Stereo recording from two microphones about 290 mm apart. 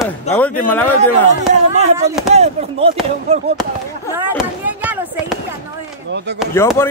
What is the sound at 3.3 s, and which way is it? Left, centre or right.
Speech, right.